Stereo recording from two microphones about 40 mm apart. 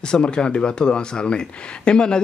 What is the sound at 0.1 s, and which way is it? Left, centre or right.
A man's voice, left.